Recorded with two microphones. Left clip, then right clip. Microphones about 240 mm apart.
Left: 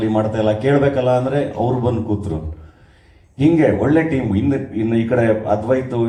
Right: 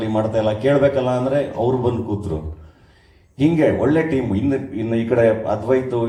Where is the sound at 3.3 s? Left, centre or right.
Right.